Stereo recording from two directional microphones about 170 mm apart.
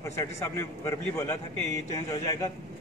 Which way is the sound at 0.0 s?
15° left (ahead or behind).